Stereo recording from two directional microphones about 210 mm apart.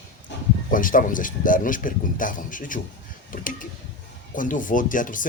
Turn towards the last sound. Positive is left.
turn(degrees=40)  # may be behind; listen again after turning